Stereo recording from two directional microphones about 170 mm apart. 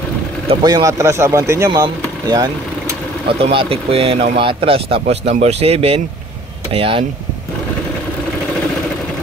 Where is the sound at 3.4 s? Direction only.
35° right (ahead or behind).